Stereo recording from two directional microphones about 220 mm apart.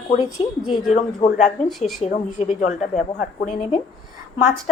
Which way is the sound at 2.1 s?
30° left (ahead or behind).